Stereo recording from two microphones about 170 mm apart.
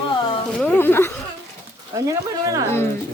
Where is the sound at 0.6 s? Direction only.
10° left (ahead or behind).